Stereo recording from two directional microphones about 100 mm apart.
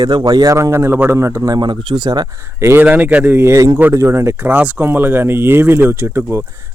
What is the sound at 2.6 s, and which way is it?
Speech, 25° right (ahead or behind).